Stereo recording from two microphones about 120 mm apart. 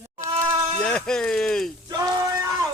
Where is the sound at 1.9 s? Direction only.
30° right (ahead or behind).